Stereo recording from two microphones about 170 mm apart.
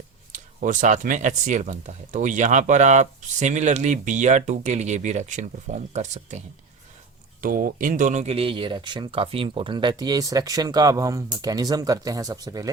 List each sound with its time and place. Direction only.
0.3 s speech: 50° right (ahead or behind)
7.4 s speech: 55° right (ahead or behind); by 12.7 s 20° right (ahead or behind)